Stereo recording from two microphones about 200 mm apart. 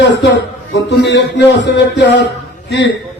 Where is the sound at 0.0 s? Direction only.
60° left (ahead or behind).